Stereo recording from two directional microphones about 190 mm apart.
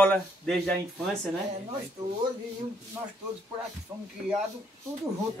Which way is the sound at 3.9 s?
15° right (ahead or behind).